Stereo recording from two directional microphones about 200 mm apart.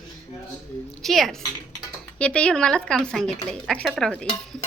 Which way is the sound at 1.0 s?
Centre (ahead or behind).